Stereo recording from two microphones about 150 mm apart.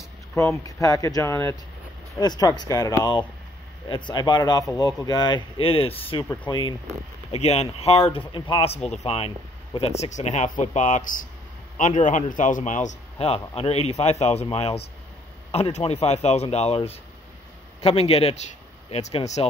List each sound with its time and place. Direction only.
0.4 s speech: 20° left (ahead or behind)
7.2 s speech: 45° left (ahead or behind)
13.2 s speech: 40° left (ahead or behind)